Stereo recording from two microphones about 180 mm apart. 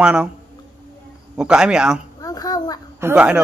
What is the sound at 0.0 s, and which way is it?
Speech, 5° right (ahead or behind).